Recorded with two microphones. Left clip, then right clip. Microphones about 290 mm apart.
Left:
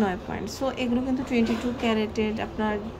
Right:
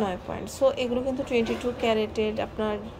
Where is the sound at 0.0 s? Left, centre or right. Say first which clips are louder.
Left 2 dB; centre.